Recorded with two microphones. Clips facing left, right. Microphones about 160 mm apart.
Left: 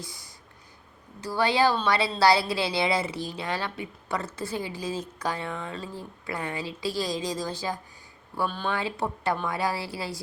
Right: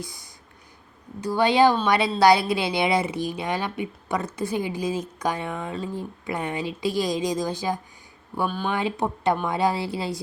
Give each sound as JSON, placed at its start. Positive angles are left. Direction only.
{"t": 1.2, "sound": "a woman's voice", "side_deg": -20}